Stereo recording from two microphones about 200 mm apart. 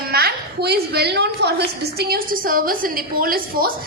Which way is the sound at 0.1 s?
50° right (ahead or behind).